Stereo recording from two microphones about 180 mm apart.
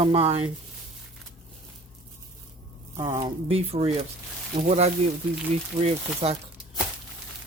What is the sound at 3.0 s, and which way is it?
Speech, 25° right (ahead or behind).